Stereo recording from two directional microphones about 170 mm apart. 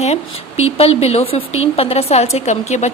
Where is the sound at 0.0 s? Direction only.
40° left (ahead or behind).